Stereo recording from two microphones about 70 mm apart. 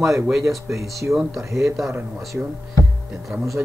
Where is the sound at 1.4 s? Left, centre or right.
Right.